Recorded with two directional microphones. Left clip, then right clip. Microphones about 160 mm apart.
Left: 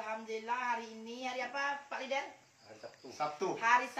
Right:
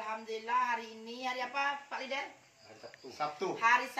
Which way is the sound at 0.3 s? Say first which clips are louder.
Right 4 dB; 20° left (ahead or behind).